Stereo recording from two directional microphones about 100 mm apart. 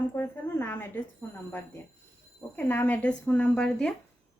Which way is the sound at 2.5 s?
15° left (ahead or behind).